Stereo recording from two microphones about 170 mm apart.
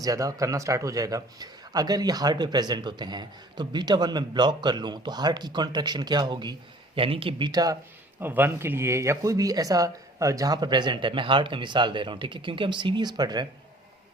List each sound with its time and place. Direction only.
0.0 s speech: 20° right (ahead or behind)
8.2 s speech: 10° right (ahead or behind)